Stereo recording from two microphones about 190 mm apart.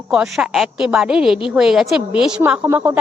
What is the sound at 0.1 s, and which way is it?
Speech, 5° right (ahead or behind).